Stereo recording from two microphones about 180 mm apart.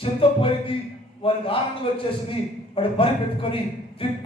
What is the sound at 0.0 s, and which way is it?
Music, 30° left (ahead or behind).